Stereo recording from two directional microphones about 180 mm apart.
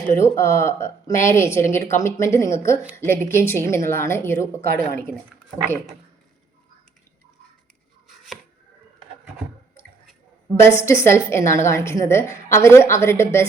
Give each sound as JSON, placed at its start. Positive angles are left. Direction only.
{"t": 0.2, "sound": "a woman's voice", "side_deg": 15}
{"t": 10.5, "sound": "a woman's voice", "side_deg": 15}